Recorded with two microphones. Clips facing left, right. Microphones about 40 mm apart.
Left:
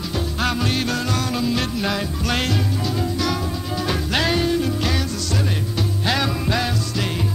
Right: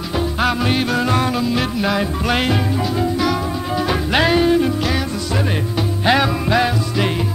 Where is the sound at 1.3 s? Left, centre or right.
Centre.